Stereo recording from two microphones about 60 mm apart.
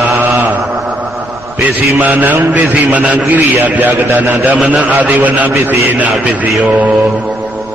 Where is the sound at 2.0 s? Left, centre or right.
Right.